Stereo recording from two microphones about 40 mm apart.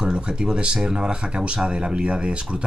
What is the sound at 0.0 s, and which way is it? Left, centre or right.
Speech, centre.